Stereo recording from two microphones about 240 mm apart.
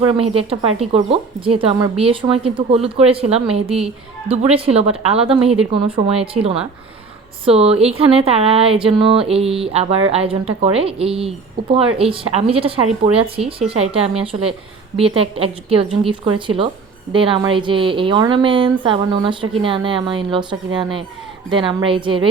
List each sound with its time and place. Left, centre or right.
0.0 s speech: right